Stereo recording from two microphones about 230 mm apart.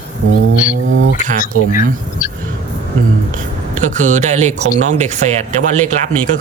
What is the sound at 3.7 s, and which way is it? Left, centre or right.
A man's voice, right.